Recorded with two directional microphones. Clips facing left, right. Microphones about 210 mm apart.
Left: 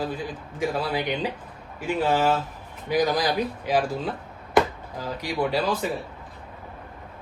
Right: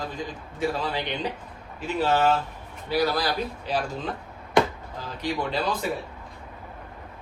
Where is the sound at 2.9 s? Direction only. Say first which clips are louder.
Left 2 dB; 15° left (ahead or behind).